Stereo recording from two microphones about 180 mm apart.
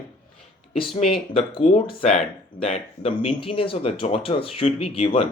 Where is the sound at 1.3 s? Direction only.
30° left (ahead or behind).